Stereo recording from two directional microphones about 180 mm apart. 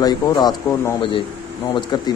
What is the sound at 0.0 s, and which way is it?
Speech, 20° left (ahead or behind).